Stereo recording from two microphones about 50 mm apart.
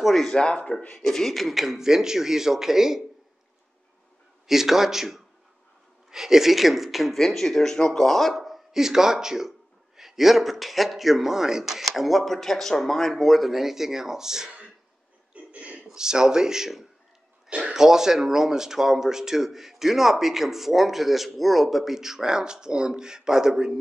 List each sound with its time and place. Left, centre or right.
0.0 s speech: centre
0.3 s speech: centre
1.0 s speech: centre
4.5 s speech: centre
15.3 s a sound: right
15.9 s speech: centre